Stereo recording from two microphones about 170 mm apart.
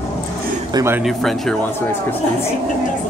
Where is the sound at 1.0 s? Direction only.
Centre (ahead or behind).